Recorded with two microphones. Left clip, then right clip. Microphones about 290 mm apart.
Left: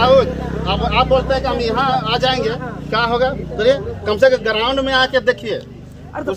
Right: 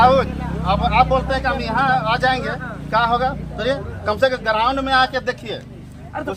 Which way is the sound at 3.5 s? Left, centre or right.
Centre.